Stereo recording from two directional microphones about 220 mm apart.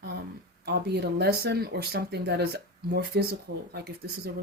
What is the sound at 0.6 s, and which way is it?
Speech, 50° right (ahead or behind).